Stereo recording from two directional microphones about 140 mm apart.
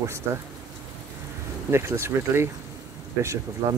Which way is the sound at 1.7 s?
20° right (ahead or behind).